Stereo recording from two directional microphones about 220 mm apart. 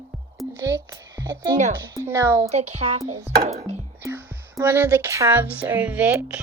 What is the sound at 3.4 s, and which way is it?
Chopping, 30° right (ahead or behind).